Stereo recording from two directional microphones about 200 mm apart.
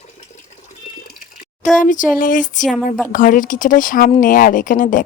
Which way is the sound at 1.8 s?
40° left (ahead or behind).